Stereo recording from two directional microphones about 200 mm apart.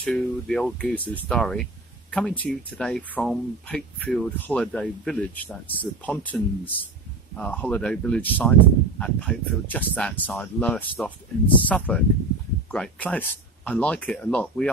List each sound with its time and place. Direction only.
0.0 s speech: 5° left (ahead or behind)